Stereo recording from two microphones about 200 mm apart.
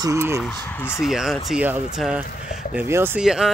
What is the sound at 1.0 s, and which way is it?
Speech, centre (ahead or behind).